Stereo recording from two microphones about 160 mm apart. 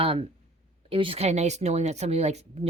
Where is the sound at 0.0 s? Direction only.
35° right (ahead or behind).